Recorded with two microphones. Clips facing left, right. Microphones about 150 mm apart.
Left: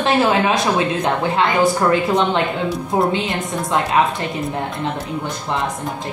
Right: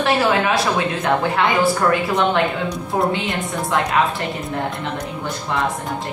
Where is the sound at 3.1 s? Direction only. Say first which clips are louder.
Left 1 dB; 20° left (ahead or behind).